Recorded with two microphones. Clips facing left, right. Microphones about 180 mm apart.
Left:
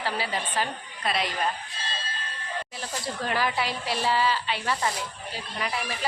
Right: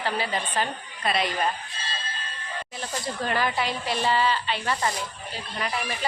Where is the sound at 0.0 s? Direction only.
5° left (ahead or behind).